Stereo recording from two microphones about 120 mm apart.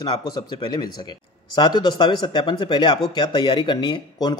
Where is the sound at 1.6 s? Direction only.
40° left (ahead or behind).